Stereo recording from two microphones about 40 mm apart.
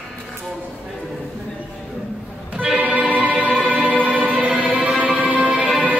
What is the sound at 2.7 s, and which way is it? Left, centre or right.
Music, right.